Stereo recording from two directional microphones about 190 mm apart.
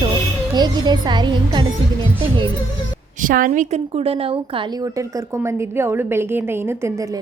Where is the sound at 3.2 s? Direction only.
45° right (ahead or behind).